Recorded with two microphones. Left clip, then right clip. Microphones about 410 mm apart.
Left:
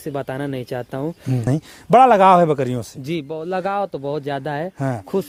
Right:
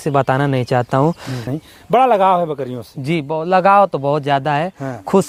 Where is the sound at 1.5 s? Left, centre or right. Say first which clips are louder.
Left 2 dB; left.